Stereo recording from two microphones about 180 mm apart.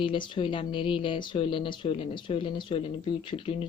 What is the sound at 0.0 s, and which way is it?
A woman's voice, 30° left (ahead or behind).